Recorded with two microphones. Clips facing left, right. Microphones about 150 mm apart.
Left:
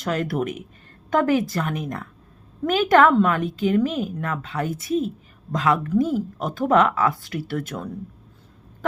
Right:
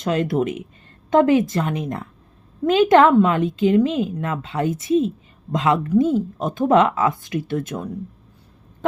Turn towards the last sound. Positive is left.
turn(degrees=-20)  # may be behind; listen again after turning